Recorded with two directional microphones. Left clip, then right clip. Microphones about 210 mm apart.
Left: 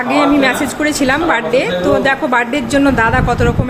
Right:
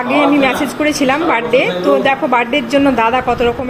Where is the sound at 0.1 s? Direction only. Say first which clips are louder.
Even; centre (ahead or behind).